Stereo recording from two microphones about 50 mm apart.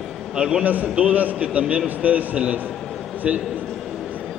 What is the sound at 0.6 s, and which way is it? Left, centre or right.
A man's voice, right.